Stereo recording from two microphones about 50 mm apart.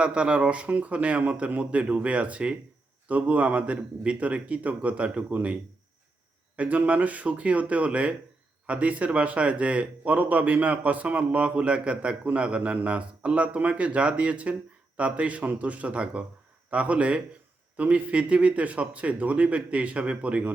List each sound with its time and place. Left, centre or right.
0.0 s speech: right
6.6 s speech: right